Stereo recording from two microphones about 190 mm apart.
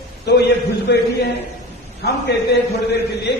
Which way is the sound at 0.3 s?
60° left (ahead or behind).